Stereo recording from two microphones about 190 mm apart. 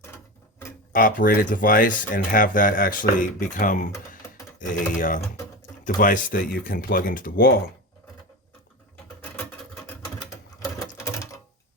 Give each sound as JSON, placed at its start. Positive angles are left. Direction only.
{"t": 0.9, "sound": "speech", "side_deg": 45}
{"t": 10.6, "sound": "sewing machine", "side_deg": 15}